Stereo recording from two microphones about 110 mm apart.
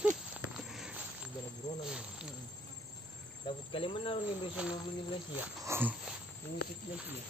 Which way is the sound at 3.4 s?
50° left (ahead or behind).